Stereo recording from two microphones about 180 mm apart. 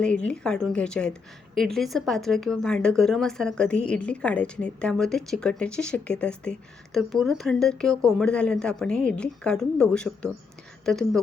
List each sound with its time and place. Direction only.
0.0 s speech: 5° left (ahead or behind)